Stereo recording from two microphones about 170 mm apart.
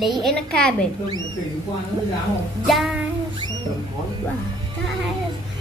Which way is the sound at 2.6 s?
Centre (ahead or behind).